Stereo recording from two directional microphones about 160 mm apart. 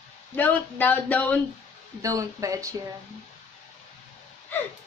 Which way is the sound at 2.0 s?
20° right (ahead or behind).